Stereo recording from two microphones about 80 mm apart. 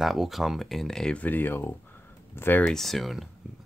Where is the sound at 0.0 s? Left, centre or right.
Centre.